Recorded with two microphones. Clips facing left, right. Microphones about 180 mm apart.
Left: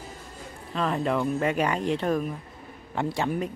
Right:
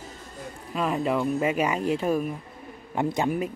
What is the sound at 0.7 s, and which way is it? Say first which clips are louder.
Speech: right 1 dB; 10° right (ahead or behind).